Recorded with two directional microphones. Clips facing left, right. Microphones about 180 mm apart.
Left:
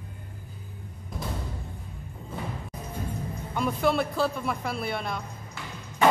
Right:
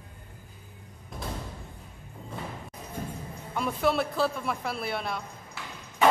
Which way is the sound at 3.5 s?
Centre (ahead or behind).